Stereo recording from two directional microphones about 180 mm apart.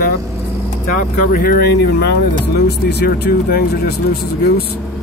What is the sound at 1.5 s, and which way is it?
Speech, 65° left (ahead or behind).